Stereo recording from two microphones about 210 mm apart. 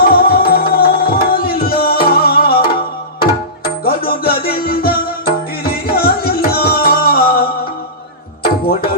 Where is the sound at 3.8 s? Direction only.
45° left (ahead or behind).